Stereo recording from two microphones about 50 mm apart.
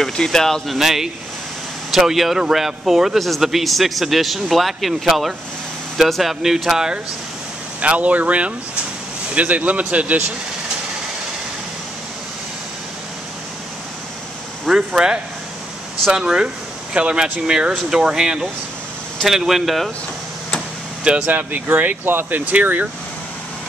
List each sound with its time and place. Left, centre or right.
0.0 s speech: centre
0.7 s a man's voice: centre
7.8 s a man's voice: right
14.7 s speech: centre
21.3 s speech: right